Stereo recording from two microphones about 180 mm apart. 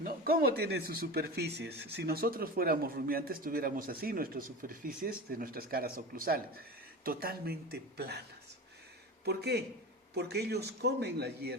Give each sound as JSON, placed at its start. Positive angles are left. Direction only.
{"t": 0.0, "sound": "speech", "side_deg": -55}
{"t": 9.2, "sound": "speech", "side_deg": -65}